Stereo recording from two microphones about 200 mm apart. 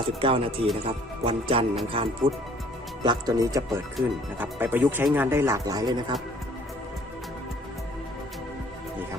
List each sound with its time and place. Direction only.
0.2 s speech: 25° right (ahead or behind)